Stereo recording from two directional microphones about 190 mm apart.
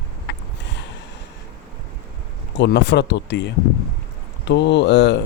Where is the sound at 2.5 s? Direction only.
65° left (ahead or behind).